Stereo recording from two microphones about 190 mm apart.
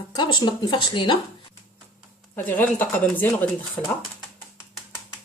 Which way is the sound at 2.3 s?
10° left (ahead or behind).